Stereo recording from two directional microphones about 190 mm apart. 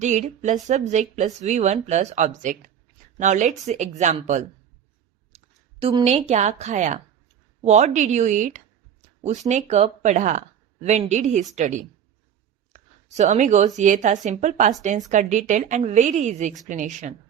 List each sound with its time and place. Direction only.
0.0 s speech: 40° right (ahead or behind)
5.3 s a sound: 35° right (ahead or behind)
5.8 s a woman's voice: 20° right (ahead or behind)
6.1 s a woman's voice: 35° right (ahead or behind)